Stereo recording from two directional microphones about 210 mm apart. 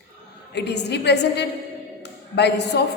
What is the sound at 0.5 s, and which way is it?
Speech, 55° left (ahead or behind).